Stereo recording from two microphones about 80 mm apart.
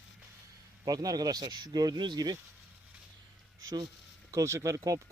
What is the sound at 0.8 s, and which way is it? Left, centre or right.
Speech, right.